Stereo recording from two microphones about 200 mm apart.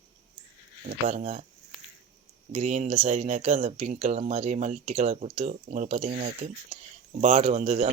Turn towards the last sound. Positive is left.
turn(degrees=-35)  # may be behind; listen again after turning